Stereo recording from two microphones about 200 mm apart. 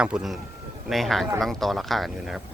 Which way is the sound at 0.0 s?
5° right (ahead or behind).